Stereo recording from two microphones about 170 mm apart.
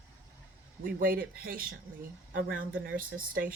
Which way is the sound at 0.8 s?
55° right (ahead or behind).